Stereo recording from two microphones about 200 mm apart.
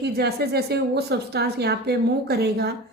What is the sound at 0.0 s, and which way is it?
A woman's voice, 55° right (ahead or behind).